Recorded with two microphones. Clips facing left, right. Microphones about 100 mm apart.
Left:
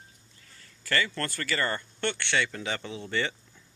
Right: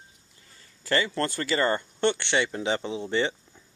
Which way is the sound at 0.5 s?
20° right (ahead or behind).